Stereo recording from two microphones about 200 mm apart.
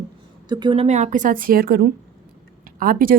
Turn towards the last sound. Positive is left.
turn(degrees=-45)  # may be behind; listen again after turning